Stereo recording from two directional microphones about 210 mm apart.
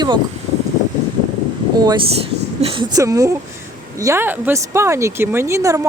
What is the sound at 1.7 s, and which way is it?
Speech, 20° right (ahead or behind).